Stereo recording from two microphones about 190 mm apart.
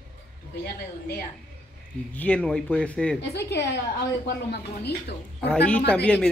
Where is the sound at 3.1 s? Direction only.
60° left (ahead or behind).